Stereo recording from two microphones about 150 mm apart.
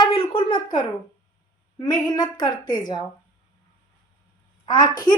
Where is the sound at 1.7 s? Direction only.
25° left (ahead or behind).